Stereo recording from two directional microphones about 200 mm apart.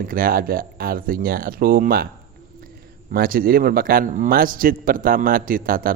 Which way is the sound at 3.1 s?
45° right (ahead or behind).